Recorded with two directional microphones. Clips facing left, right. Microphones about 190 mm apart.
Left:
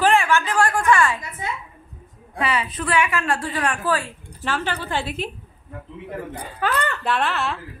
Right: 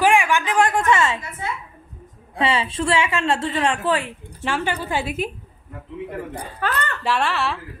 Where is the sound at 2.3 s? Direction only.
25° right (ahead or behind).